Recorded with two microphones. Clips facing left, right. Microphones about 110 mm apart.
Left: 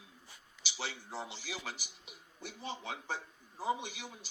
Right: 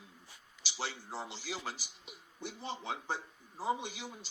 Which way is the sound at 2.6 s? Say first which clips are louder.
Even; 10° left (ahead or behind).